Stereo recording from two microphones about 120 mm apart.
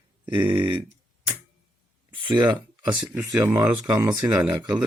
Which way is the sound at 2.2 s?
40° right (ahead or behind).